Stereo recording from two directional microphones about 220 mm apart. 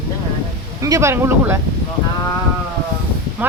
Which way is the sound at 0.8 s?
15° right (ahead or behind).